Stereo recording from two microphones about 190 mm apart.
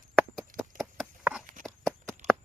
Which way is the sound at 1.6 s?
Centre (ahead or behind).